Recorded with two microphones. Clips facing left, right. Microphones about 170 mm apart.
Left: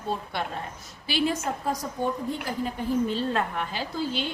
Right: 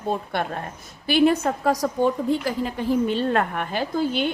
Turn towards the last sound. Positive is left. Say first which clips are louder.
# right 6 dB
turn(degrees=-55)  # may be behind; listen again after turning